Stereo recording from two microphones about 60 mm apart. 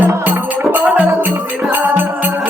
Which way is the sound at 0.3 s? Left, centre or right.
Right.